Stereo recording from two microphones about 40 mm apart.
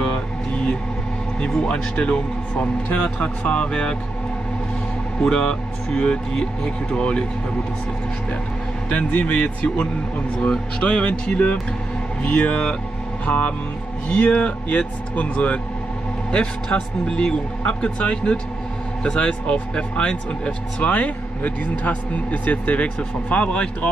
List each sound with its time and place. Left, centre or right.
0.0 s music: left
1.4 s speech: left
5.2 s speech: left
8.8 s speech: left
10.8 s speech: left